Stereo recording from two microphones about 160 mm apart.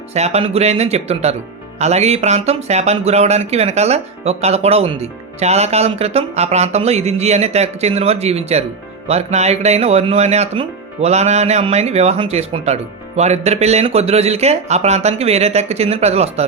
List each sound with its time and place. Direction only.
0.1 s speech: 40° right (ahead or behind)